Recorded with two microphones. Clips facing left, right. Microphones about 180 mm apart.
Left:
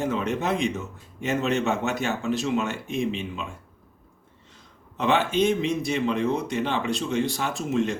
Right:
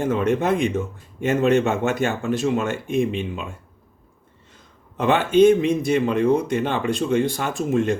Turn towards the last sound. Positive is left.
turn(degrees=-50)  # may be behind; listen again after turning